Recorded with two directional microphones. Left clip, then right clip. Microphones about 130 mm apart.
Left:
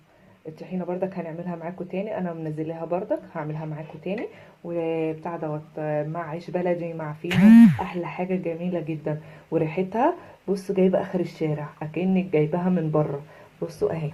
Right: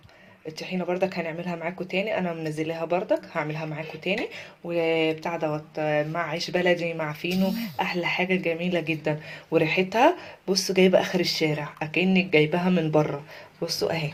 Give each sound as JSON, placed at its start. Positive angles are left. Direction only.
{"t": 0.6, "sound": "a woman's voice", "side_deg": -25}
{"t": 10.4, "sound": "a woman's voice", "side_deg": -40}
{"t": 11.3, "sound": "speech", "side_deg": -25}